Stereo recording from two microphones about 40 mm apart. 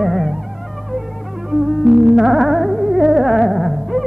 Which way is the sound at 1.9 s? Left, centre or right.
Centre.